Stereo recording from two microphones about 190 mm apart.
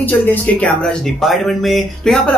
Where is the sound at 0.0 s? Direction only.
10° left (ahead or behind).